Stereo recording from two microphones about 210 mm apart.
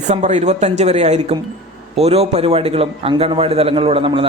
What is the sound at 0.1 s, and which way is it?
Speech, 35° right (ahead or behind).